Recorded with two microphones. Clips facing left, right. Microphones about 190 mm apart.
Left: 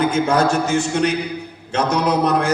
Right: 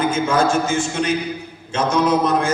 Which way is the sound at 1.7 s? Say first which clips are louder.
Right 1 dB; 65° left (ahead or behind).